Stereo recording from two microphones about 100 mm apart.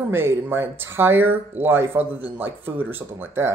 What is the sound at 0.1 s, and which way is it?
Speech, 25° right (ahead or behind).